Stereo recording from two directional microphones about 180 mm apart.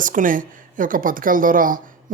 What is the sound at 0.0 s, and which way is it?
A woman's voice, 50° right (ahead or behind).